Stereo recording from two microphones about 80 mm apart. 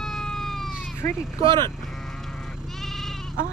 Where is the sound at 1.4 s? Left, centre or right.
Right.